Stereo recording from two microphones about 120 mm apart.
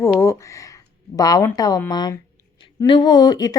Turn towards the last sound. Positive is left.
turn(degrees=35)  # may be behind; listen again after turning